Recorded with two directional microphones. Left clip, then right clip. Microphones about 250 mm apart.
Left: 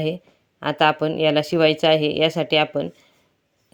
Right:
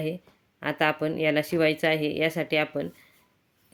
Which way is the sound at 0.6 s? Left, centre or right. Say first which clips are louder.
Left 7 dB; centre.